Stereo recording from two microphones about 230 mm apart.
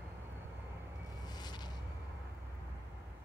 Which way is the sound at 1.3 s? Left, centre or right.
Centre.